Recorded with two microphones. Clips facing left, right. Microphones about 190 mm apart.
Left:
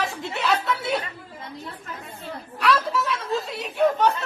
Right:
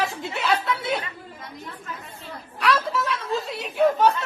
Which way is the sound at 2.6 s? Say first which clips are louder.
Left 1 dB; centre (ahead or behind).